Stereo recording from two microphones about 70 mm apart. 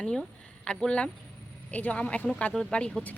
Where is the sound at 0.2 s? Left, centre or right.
Centre.